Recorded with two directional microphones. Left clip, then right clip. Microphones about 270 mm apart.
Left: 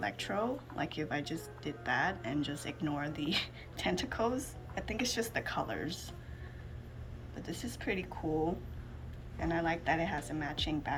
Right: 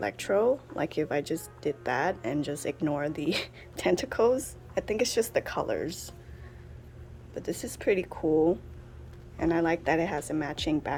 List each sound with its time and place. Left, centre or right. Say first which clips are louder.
0.0 s speech: right 9 dB; right
7.3 s speech: right 8 dB; right
9.4 s speech: right 7 dB; right